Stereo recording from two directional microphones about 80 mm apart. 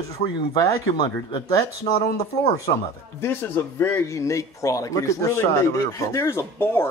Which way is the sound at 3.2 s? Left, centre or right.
Left.